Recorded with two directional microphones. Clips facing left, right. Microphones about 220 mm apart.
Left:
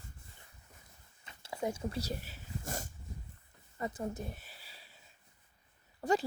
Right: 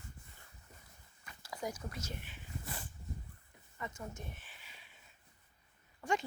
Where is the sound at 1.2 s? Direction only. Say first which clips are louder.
Left 5 dB; 25° left (ahead or behind).